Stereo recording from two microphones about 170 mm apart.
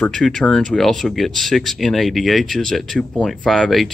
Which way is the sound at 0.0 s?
5° left (ahead or behind).